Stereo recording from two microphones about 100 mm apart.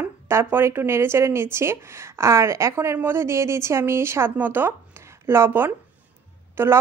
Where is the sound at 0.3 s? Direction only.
25° right (ahead or behind).